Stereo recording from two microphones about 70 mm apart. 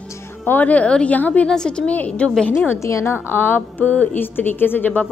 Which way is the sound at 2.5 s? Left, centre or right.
Left.